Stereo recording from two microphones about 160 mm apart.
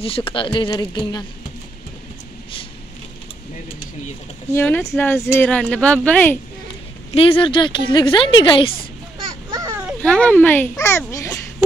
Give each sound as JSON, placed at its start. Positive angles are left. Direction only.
{"t": 0.0, "sound": "a woman's voice", "side_deg": 35}
{"t": 4.6, "sound": "speech", "side_deg": 15}
{"t": 7.1, "sound": "a woman's voice", "side_deg": 35}
{"t": 9.5, "sound": "a sound", "side_deg": -20}
{"t": 10.0, "sound": "speech", "side_deg": 5}